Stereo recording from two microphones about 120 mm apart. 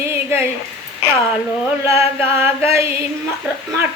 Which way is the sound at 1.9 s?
20° right (ahead or behind).